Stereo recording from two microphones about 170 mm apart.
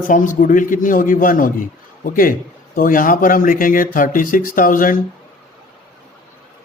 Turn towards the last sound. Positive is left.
turn(degrees=55)  # may be behind; listen again after turning